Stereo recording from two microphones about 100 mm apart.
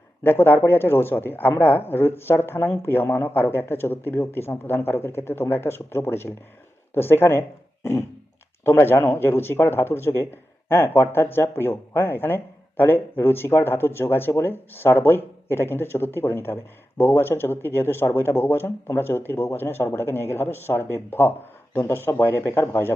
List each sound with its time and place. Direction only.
0.2 s speech: 20° left (ahead or behind)
8.6 s speech: 20° left (ahead or behind)